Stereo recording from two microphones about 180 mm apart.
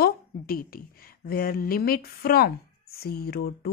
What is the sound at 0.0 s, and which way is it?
A woman's voice, 55° left (ahead or behind).